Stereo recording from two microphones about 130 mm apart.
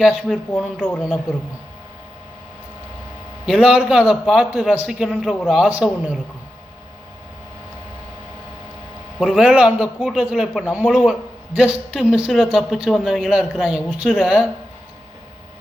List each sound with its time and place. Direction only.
0.0 s a man's voice: 5° right (ahead or behind)
0.5 s speech: 10° left (ahead or behind)
3.4 s a man's voice: 5° right (ahead or behind)
9.2 s a man's voice: 5° right (ahead or behind)